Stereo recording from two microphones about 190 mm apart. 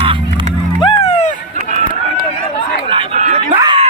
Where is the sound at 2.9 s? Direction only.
35° right (ahead or behind).